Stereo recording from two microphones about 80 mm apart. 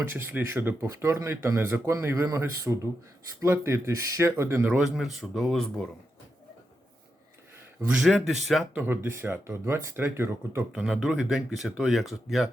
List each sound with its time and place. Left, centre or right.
0.0 s a man's voice: right
4.8 s speech: centre
7.9 s speech: centre
8.7 s speech: right
10.7 s speech: centre